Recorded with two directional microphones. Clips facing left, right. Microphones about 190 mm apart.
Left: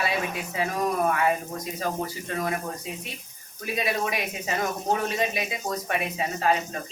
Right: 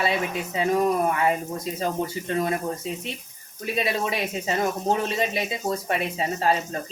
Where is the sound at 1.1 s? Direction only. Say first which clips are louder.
Right 1 dB; 25° right (ahead or behind).